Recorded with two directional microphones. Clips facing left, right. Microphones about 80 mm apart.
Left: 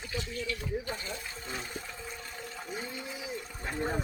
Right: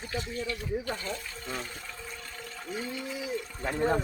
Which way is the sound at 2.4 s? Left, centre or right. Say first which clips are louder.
Right 3 dB; centre.